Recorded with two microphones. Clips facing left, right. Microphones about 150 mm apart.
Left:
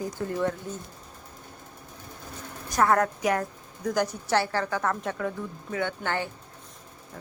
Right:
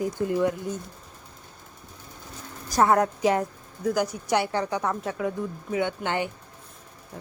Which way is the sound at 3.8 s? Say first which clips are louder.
Right 2 dB; 10° right (ahead or behind).